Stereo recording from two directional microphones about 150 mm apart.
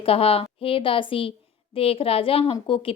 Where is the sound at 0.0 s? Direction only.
40° left (ahead or behind).